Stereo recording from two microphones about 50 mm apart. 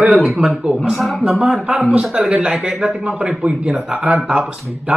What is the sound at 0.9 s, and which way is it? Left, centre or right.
Speech, centre.